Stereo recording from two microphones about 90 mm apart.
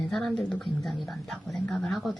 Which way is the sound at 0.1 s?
5° left (ahead or behind).